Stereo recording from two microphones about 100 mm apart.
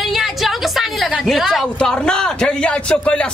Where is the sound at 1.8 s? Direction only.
10° left (ahead or behind).